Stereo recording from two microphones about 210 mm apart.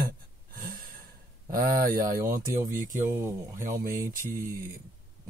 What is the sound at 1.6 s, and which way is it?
Speech, 40° right (ahead or behind).